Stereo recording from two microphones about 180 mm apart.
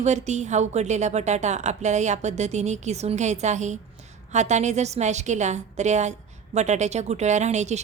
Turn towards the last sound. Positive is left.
turn(degrees=-40)  # may be behind; listen again after turning